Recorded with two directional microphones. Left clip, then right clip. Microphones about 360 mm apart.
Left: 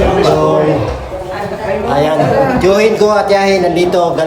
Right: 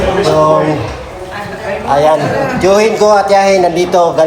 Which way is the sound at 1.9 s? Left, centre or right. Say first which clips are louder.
Right 3 dB; centre.